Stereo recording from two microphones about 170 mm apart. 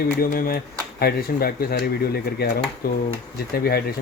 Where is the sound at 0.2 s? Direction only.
60° left (ahead or behind).